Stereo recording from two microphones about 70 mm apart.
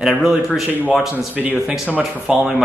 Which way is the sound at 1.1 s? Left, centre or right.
Right.